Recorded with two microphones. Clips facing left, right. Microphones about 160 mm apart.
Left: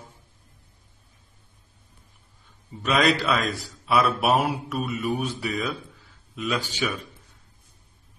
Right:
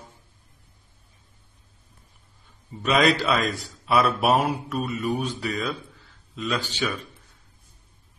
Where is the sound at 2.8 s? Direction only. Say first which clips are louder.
Right 1 dB; centre (ahead or behind).